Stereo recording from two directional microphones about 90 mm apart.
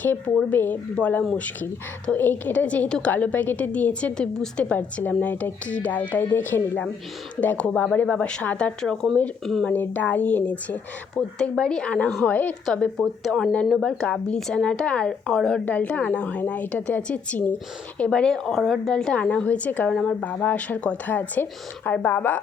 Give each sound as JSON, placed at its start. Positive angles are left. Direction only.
{"t": 0.5, "sound": "a woman's voice", "side_deg": 20}
{"t": 9.6, "sound": "a woman's voice", "side_deg": 20}
{"t": 15.6, "sound": "a woman's voice", "side_deg": 20}
{"t": 19.9, "sound": "a woman's voice", "side_deg": 5}
{"t": 20.2, "sound": "a woman's voice", "side_deg": 20}